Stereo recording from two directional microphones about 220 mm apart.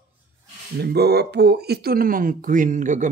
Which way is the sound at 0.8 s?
45° right (ahead or behind).